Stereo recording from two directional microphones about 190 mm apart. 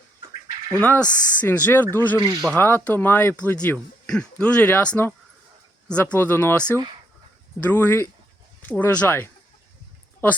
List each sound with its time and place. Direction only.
0.8 s speech: 5° left (ahead or behind)
2.1 s speech: 15° right (ahead or behind)
2.6 s speech: 10° left (ahead or behind)